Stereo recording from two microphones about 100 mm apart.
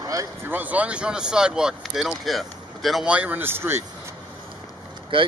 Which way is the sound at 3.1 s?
15° right (ahead or behind).